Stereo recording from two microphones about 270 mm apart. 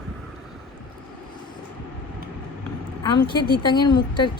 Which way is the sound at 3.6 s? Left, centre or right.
Centre.